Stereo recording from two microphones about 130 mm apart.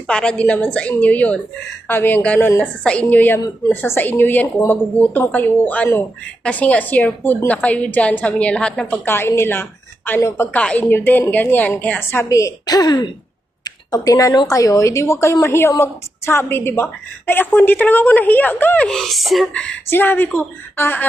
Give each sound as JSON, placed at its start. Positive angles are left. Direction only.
{"t": 0.1, "sound": "a woman's voice", "side_deg": 5}
{"t": 9.0, "sound": "a woman's voice", "side_deg": 20}
{"t": 18.9, "sound": "speech", "side_deg": 0}
{"t": 19.9, "sound": "a woman's voice", "side_deg": 15}